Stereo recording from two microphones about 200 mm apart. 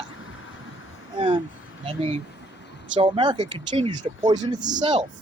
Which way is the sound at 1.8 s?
30° right (ahead or behind).